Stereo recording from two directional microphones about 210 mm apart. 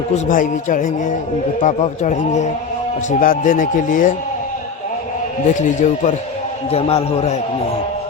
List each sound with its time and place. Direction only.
0.3 s speech: 40° left (ahead or behind)
5.5 s a man's voice: 35° left (ahead or behind)